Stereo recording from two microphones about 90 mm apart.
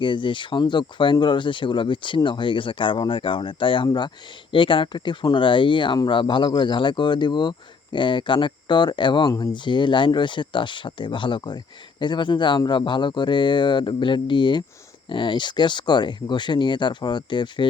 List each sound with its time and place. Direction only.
0.0 s speech: 65° left (ahead or behind)
3.8 s speech: 55° left (ahead or behind)
4.5 s speech: 65° left (ahead or behind)